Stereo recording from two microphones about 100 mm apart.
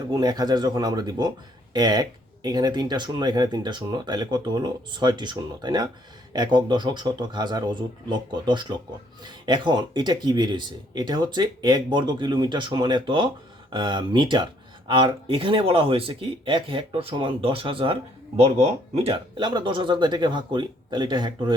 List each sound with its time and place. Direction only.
0.1 s speech: 40° right (ahead or behind); by 17.9 s 65° right (ahead or behind)
18.3 s speech: 80° right; by 21.5 s 50° right (ahead or behind)